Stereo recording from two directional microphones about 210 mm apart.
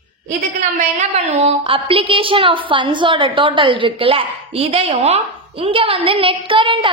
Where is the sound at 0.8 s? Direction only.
35° right (ahead or behind).